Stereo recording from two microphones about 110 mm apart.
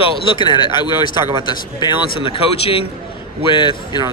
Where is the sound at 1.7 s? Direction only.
55° left (ahead or behind).